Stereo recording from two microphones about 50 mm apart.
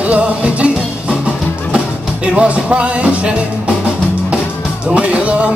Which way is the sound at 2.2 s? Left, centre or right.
Right.